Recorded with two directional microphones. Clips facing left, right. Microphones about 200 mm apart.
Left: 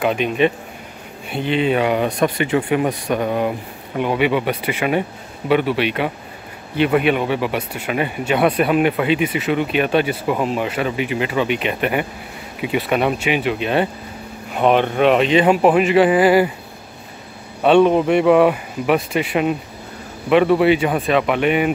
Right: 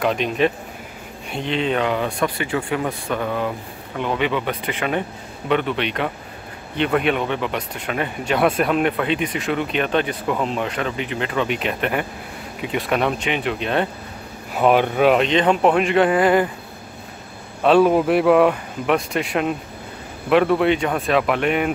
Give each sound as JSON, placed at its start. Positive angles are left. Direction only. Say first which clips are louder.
{"t": 0.0, "sound": "speech", "louder": "left 2 dB", "side_deg": 5}
{"t": 17.6, "sound": "speech", "louder": "left 2 dB", "side_deg": -5}